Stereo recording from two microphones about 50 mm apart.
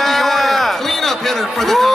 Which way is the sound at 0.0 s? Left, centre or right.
Centre.